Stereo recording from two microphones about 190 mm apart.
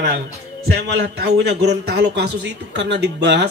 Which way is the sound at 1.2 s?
60° right (ahead or behind).